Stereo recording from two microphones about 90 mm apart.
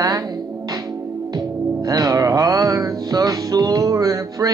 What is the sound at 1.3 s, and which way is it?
Music, 45° right (ahead or behind).